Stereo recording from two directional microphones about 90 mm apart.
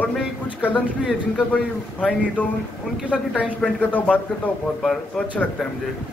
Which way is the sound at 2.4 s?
20° left (ahead or behind).